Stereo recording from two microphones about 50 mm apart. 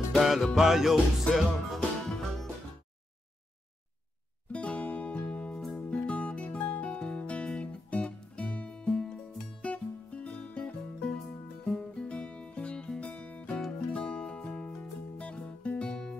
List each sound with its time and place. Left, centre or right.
0.2 s music: centre
2.0 s music: centre
4.5 s music: left